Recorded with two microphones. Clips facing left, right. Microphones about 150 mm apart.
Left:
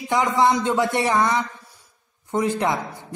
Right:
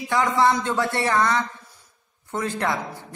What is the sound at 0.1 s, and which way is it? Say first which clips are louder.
A man's voice: left 1 dB; 20° left (ahead or behind).